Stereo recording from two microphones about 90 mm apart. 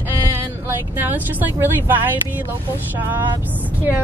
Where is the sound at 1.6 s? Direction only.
25° right (ahead or behind).